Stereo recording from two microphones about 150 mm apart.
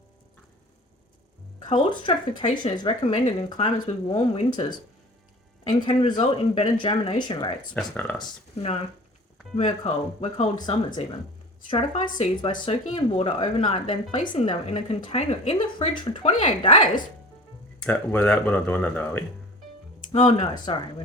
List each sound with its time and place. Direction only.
1.5 s speech: 35° left (ahead or behind)
5.8 s speech: 40° left (ahead or behind)
7.7 s speech: 10° left (ahead or behind)
9.6 s speech: 45° left (ahead or behind)
17.8 s speech: 10° left (ahead or behind)
20.1 s speech: 40° left (ahead or behind)